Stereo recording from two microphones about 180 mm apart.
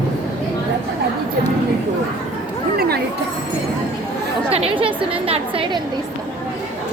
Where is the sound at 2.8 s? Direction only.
60° right (ahead or behind).